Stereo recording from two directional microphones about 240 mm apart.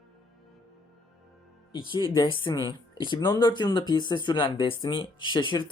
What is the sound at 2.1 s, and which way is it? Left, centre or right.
Speech, centre.